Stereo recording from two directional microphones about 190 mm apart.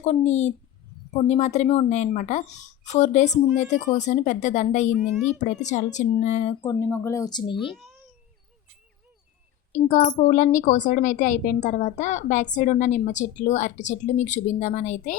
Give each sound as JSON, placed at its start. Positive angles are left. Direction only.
{"t": 0.0, "sound": "a woman's voice", "side_deg": 35}
{"t": 6.6, "sound": "speech", "side_deg": 20}
{"t": 7.5, "sound": "a child's voice", "side_deg": 0}
{"t": 9.7, "sound": "a woman's voice", "side_deg": 40}